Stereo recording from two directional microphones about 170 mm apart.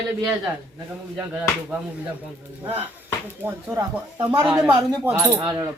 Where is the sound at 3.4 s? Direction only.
15° right (ahead or behind).